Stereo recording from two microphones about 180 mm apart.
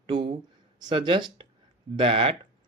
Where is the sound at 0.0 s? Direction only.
30° right (ahead or behind).